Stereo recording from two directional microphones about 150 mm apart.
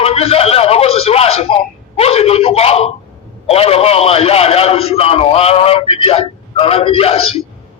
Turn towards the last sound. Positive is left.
turn(degrees=40)  # may be behind; listen again after turning